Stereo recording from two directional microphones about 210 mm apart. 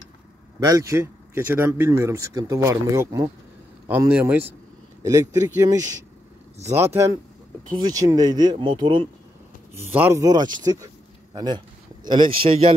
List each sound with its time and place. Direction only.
0.7 s speech: 15° right (ahead or behind)
9.8 s speech: 10° right (ahead or behind); by 12.7 s 25° right (ahead or behind)